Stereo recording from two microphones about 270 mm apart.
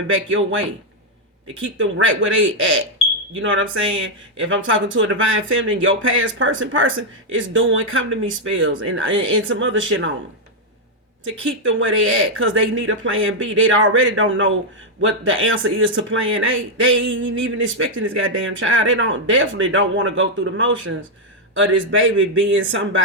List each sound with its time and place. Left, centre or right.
0.1 s speech: right
1.8 s speech: right
11.3 s speech: right